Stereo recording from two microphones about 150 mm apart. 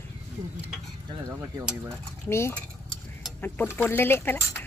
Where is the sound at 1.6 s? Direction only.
5° right (ahead or behind).